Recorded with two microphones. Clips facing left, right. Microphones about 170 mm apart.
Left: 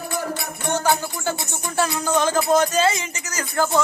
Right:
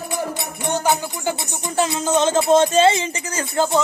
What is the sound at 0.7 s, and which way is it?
Music, 15° right (ahead or behind).